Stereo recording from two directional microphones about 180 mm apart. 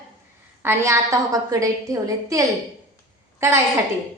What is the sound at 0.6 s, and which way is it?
A woman's voice, 15° right (ahead or behind).